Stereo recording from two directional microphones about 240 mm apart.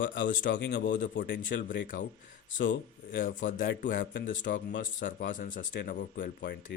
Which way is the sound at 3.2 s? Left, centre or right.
Left.